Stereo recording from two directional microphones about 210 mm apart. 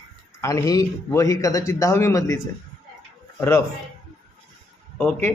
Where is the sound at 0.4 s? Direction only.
15° left (ahead or behind).